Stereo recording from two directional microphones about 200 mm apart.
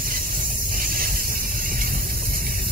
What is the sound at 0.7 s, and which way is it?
Vehicle, 45° right (ahead or behind).